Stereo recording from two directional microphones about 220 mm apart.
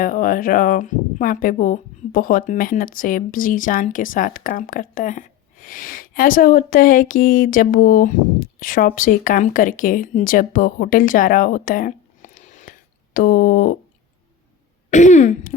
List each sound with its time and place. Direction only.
0.0 s speech: 40° left (ahead or behind)
14.8 s speech: 35° left (ahead or behind)